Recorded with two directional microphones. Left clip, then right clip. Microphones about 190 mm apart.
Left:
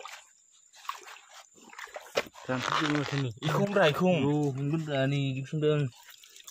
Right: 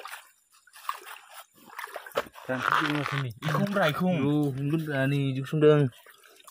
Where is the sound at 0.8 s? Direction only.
20° right (ahead or behind).